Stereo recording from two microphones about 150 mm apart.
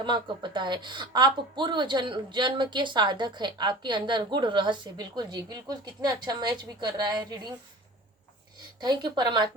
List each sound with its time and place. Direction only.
0.0 s speech: 30° right (ahead or behind)
8.8 s a woman's voice: 30° right (ahead or behind)